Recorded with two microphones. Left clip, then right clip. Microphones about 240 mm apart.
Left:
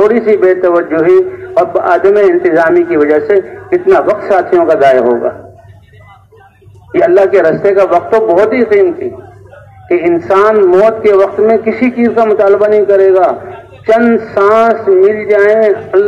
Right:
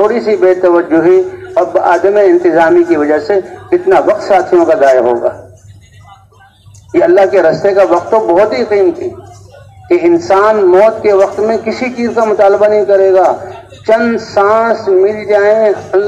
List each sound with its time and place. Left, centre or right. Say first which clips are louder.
0.0 s a man's voice: left 1 dB; right
6.9 s a man's voice: even; right